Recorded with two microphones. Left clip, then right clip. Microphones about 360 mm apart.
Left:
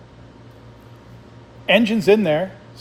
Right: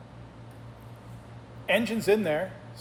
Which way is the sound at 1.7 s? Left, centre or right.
Left.